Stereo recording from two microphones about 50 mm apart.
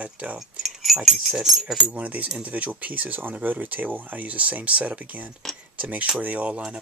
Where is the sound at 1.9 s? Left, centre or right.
Right.